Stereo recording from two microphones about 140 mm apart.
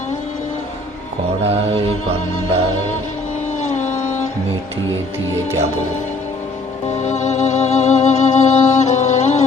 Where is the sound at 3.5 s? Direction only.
55° left (ahead or behind).